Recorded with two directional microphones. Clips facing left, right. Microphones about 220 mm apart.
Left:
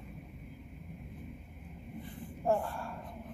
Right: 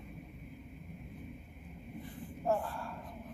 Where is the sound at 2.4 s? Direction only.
20° left (ahead or behind).